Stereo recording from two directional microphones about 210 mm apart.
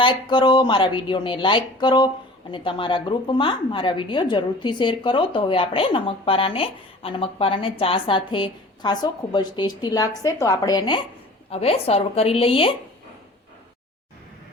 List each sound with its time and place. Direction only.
0.0 s a woman's voice: 20° left (ahead or behind)